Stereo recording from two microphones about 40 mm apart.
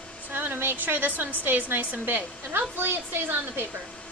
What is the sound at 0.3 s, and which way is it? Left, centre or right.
A woman's voice, right.